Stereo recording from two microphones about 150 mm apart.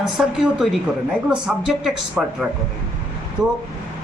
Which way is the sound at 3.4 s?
25° right (ahead or behind).